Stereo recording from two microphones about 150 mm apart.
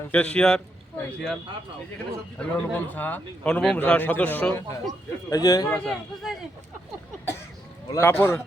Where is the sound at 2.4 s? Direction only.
10° left (ahead or behind).